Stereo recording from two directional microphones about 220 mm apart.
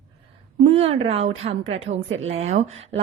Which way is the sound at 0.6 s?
25° right (ahead or behind).